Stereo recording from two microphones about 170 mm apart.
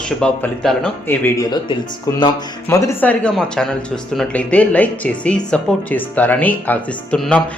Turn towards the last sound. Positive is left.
turn(degrees=5)  # may be behind; listen again after turning